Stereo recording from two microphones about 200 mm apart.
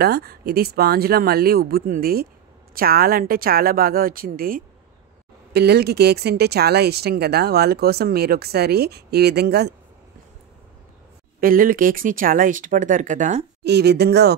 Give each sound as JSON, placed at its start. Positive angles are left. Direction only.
{"t": 0.0, "sound": "speech", "side_deg": -50}
{"t": 11.4, "sound": "speech", "side_deg": -45}
{"t": 13.7, "sound": "speech", "side_deg": -55}